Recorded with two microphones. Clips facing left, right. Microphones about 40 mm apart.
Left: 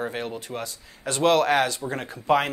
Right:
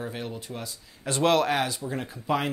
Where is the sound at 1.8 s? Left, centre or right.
Left.